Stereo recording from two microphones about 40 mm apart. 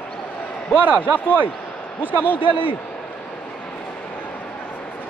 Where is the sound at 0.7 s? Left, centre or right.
Right.